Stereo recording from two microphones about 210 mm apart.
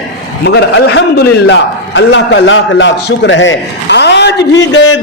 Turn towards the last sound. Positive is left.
turn(degrees=60)  # may be behind; listen again after turning